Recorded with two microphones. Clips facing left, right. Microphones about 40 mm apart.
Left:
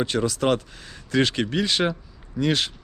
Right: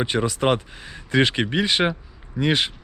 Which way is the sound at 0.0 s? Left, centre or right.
Right.